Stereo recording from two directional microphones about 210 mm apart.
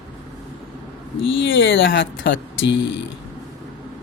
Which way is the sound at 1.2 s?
65° left (ahead or behind).